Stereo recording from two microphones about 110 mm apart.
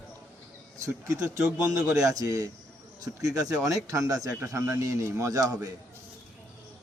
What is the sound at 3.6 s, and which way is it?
A man's voice, 30° right (ahead or behind).